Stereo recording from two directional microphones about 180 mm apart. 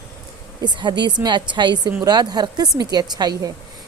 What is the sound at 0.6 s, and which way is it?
A woman's voice, 25° right (ahead or behind).